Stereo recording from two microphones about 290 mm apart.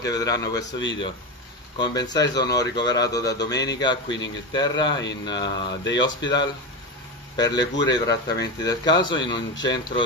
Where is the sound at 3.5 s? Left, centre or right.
Left.